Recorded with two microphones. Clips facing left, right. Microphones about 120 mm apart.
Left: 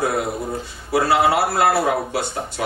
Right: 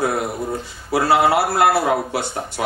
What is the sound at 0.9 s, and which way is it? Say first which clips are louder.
Speech: right 1 dB; 25° right (ahead or behind).